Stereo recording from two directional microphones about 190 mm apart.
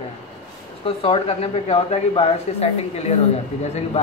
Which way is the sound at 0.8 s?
30° left (ahead or behind).